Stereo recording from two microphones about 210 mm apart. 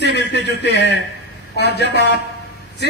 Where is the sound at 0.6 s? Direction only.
55° left (ahead or behind).